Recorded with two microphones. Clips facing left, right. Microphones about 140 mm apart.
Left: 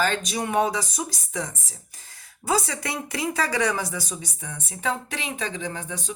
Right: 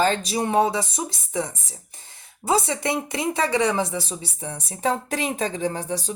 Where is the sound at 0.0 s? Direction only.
30° right (ahead or behind).